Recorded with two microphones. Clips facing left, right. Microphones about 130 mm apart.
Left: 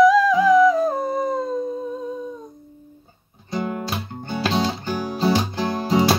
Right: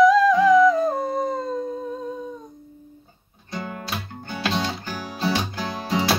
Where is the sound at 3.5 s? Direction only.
20° left (ahead or behind).